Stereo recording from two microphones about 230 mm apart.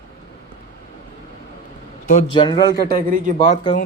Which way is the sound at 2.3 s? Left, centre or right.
Centre.